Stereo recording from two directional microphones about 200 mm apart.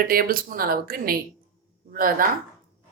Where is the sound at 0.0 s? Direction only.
45° right (ahead or behind).